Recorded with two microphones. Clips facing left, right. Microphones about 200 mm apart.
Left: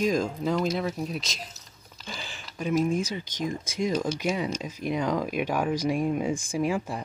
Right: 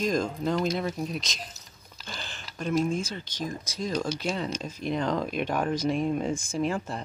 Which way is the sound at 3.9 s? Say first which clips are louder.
Left 2 dB; 5° left (ahead or behind).